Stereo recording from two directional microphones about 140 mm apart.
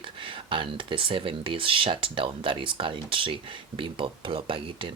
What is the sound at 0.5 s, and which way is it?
Speech, 35° right (ahead or behind).